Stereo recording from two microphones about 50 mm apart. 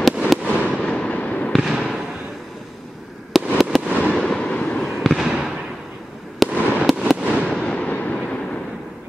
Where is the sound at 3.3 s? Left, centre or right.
Centre.